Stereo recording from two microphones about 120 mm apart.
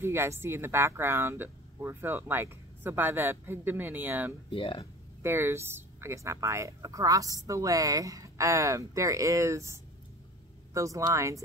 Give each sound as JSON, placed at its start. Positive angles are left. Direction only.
{"t": 0.0, "sound": "speech", "side_deg": -20}
{"t": 4.5, "sound": "speech", "side_deg": 45}
{"t": 5.2, "sound": "speech", "side_deg": -20}